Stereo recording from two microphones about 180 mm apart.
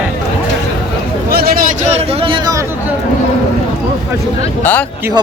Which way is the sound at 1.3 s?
60° right (ahead or behind).